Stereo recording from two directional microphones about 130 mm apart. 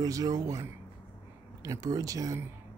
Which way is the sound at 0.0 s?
30° right (ahead or behind).